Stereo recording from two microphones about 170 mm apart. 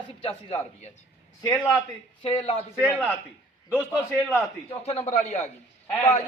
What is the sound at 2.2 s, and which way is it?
Speech, 30° left (ahead or behind).